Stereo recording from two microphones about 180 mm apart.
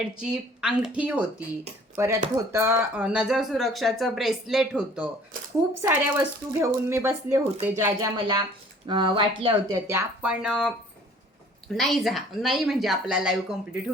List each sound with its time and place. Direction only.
0.0 s speech: 5° right (ahead or behind)